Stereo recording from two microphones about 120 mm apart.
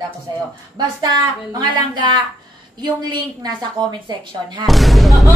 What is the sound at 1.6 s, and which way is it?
A man's voice, 40° right (ahead or behind).